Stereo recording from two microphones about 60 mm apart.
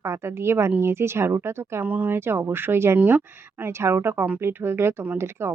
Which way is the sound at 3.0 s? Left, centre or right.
Right.